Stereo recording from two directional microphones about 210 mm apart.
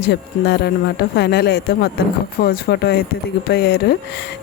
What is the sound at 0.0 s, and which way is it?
A woman's voice, 50° left (ahead or behind).